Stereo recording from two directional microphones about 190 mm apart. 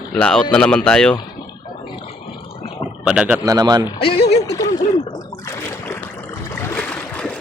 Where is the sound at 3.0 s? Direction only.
5° right (ahead or behind).